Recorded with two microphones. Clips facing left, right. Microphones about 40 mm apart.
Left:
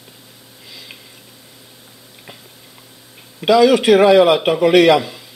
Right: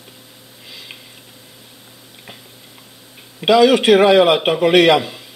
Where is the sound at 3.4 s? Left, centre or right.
Centre.